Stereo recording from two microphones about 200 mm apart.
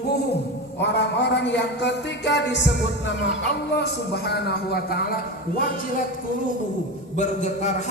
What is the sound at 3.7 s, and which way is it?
A man's voice, 55° left (ahead or behind).